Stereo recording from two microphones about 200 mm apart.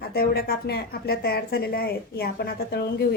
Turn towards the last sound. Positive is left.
turn(degrees=50)  # may be behind; listen again after turning